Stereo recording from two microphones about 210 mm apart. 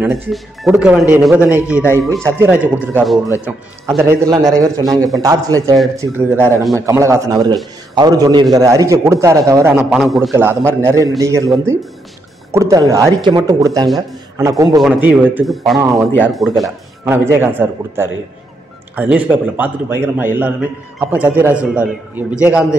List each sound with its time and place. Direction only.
0.0 s a man's voice: centre (ahead or behind)
14.8 s a man's voice: 5° right (ahead or behind)
17.1 s speech: 10° right (ahead or behind)